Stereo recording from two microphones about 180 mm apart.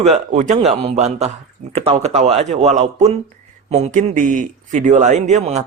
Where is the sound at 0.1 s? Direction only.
40° right (ahead or behind).